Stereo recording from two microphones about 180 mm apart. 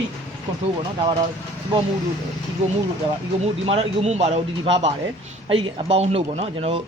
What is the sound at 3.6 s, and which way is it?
Speech, 35° right (ahead or behind).